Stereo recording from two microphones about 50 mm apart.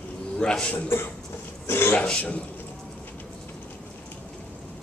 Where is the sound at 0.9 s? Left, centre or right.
Left.